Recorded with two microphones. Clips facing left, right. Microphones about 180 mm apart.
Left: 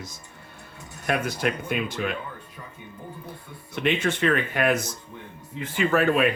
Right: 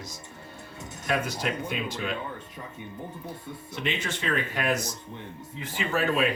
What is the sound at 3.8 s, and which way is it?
Speech, 55° left (ahead or behind).